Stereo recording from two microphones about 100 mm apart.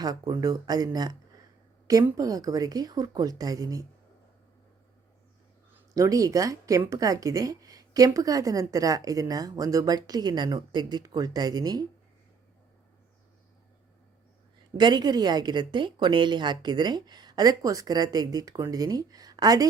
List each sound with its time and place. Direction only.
0.0 s speech: 40° right (ahead or behind)
2.1 s speech: 40° right (ahead or behind)
5.9 s speech: 35° right (ahead or behind)
14.8 s a woman's voice: 45° right (ahead or behind)